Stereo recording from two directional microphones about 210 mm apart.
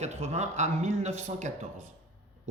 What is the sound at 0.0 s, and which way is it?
Speech, 30° right (ahead or behind).